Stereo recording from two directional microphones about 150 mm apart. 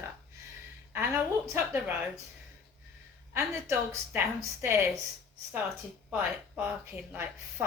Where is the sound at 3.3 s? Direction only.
15° right (ahead or behind).